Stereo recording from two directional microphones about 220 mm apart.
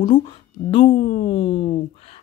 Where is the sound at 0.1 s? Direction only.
25° left (ahead or behind).